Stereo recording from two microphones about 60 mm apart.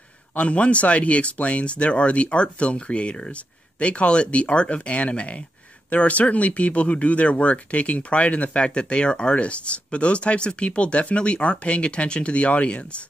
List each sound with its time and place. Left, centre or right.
0.3 s speech: left